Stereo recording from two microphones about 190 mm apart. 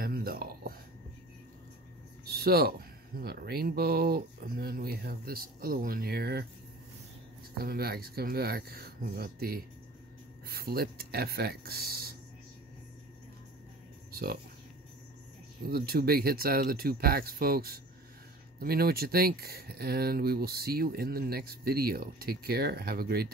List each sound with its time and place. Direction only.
0.0 s a sound: 50° right (ahead or behind)
2.2 s a sound: 55° right (ahead or behind)
3.2 s speech: 50° right (ahead or behind)
7.6 s speech: 55° right (ahead or behind)
14.1 s speech: 55° right (ahead or behind)
15.6 s speech: 50° right (ahead or behind)